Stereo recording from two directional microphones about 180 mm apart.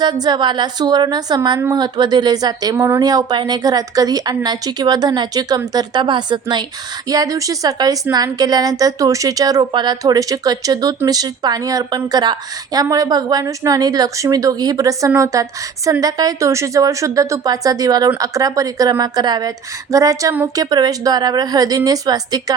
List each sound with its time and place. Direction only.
0.0 s a woman's voice: 25° right (ahead or behind)